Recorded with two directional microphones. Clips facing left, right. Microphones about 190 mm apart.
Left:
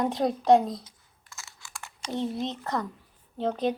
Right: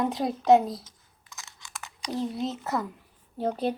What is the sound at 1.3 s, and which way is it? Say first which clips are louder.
Computer keyboard: even; 20° right (ahead or behind).